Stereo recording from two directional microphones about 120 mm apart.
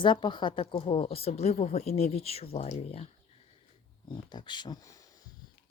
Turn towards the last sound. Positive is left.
turn(degrees=40)  # may be behind; listen again after turning